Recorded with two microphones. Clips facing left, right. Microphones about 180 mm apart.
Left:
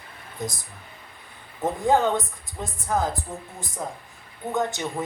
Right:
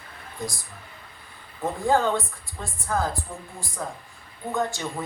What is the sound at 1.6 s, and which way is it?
Speech, 20° left (ahead or behind).